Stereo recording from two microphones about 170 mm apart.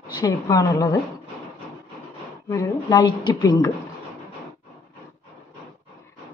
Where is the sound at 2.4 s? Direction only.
20° left (ahead or behind).